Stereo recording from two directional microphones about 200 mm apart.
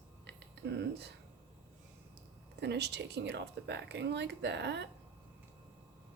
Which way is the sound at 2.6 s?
60° right (ahead or behind).